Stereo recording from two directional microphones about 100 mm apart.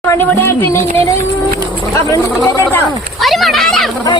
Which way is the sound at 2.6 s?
20° left (ahead or behind).